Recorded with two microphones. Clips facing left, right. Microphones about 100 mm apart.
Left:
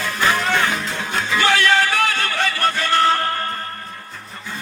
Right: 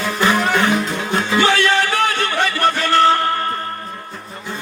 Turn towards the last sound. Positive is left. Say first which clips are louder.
# right 3 dB
turn(degrees=-20)  # may be behind; listen again after turning